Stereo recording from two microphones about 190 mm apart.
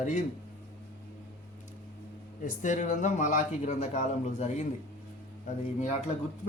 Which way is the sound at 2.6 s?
40° left (ahead or behind).